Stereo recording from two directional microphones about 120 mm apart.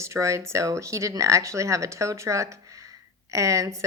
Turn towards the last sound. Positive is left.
turn(degrees=-25)  # may be behind; listen again after turning